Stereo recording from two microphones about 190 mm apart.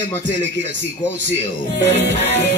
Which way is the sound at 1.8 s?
35° left (ahead or behind).